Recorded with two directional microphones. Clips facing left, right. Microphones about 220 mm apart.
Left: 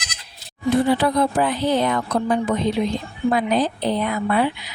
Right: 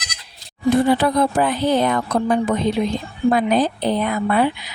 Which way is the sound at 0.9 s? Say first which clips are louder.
Right 2 dB; 50° right (ahead or behind).